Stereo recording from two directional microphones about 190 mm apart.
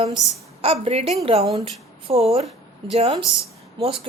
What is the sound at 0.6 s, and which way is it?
A woman's voice, 30° right (ahead or behind).